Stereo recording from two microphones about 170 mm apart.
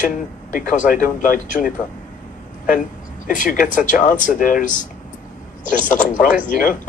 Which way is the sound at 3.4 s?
50° left (ahead or behind).